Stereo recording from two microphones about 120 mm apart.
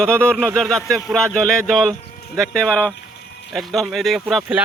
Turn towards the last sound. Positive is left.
turn(degrees=0)  # may be behind; listen again after turning